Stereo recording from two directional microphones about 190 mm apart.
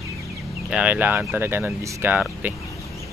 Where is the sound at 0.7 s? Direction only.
5° right (ahead or behind).